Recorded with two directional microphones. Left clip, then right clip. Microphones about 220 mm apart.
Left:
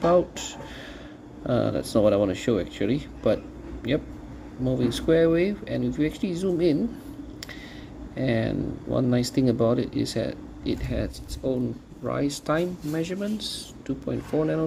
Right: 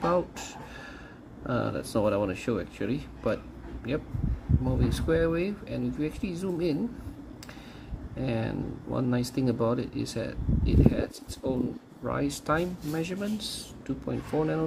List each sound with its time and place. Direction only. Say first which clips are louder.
0.0 s speech: left 6 dB; 5° left (ahead or behind)
1.5 s speech: left 6 dB; 5° left (ahead or behind)
4.6 s speech: left 6 dB; 5° left (ahead or behind)
8.2 s speech: left 6 dB; 5° left (ahead or behind)